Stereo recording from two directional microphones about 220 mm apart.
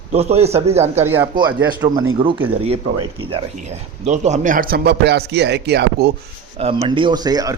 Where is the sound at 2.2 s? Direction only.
20° right (ahead or behind); by 6.1 s 50° right (ahead or behind).